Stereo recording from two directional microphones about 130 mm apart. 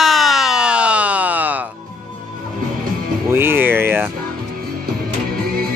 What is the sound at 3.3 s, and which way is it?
Speech, 15° right (ahead or behind).